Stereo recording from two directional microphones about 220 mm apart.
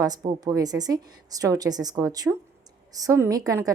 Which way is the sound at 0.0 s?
15° right (ahead or behind).